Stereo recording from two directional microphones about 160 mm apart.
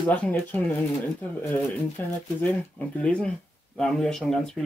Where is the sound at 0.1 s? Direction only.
10° left (ahead or behind).